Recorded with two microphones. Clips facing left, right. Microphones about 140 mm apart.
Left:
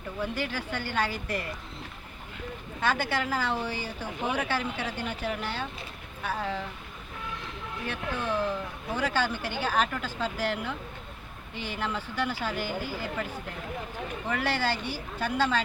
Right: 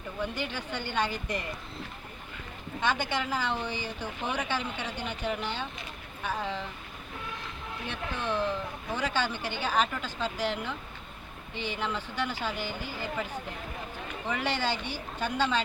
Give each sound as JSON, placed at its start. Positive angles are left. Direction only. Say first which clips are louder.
{"t": 0.2, "sound": "speech", "louder": "left 2 dB", "side_deg": 5}
{"t": 2.8, "sound": "speech", "louder": "left 2 dB", "side_deg": 10}
{"t": 7.9, "sound": "speech", "louder": "left 2 dB", "side_deg": 10}
{"t": 14.3, "sound": "speech", "louder": "left 1 dB", "side_deg": 5}